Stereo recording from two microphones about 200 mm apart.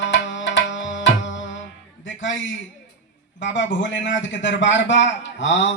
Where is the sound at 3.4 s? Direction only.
65° left (ahead or behind).